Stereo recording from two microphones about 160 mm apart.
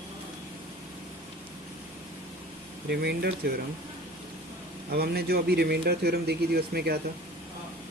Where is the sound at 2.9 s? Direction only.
90° right.